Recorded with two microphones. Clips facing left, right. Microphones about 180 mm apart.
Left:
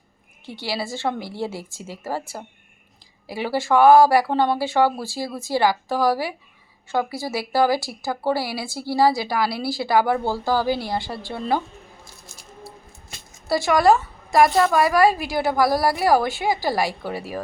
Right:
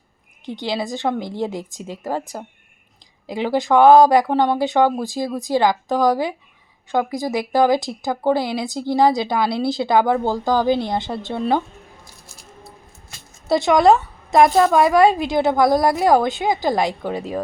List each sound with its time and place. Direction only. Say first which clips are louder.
0.4 s speech: right 4 dB; 20° right (ahead or behind)
13.5 s a woman's voice: right 3 dB; 20° right (ahead or behind)